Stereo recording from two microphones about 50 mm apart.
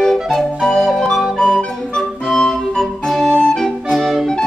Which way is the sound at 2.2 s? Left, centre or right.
Centre.